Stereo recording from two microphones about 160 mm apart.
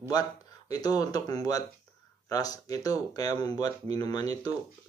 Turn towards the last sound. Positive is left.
turn(degrees=25)  # may be behind; listen again after turning